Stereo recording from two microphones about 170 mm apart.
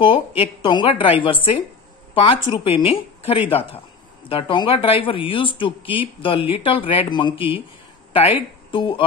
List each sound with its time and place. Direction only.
0.4 s a woman's voice: 25° left (ahead or behind)